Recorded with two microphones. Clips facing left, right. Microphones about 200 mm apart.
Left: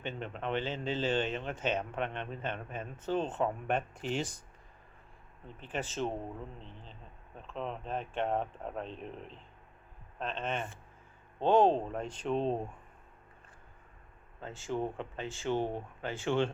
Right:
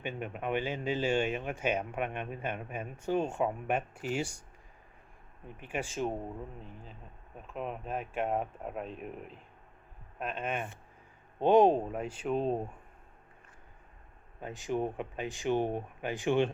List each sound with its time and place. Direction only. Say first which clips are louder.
0.0 s speech: right 1 dB; 10° right (ahead or behind)
5.5 s speech: right 1 dB; 10° right (ahead or behind)
14.4 s speech: right 2 dB; 15° right (ahead or behind)